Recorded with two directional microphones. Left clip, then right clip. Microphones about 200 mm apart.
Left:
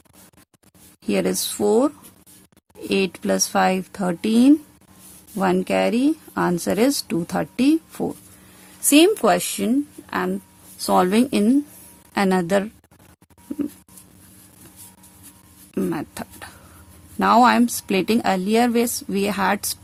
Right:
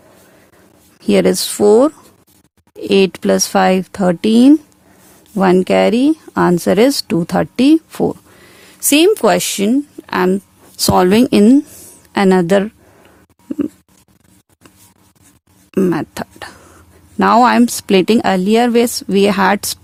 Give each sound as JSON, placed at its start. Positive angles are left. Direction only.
{"t": 1.0, "sound": "speech", "side_deg": -40}
{"t": 13.5, "sound": "stomach rumble", "side_deg": -35}
{"t": 15.7, "sound": "a sound", "side_deg": -40}
{"t": 17.2, "sound": "speech", "side_deg": -40}